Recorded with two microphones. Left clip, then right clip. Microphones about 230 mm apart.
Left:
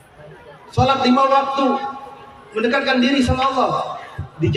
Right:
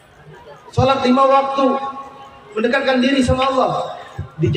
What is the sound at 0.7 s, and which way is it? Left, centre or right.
Speech, left.